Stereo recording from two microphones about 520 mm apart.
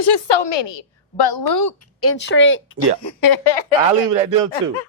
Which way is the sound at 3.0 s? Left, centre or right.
Left.